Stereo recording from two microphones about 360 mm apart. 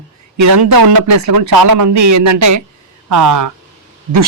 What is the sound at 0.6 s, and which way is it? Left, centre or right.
Speech, right.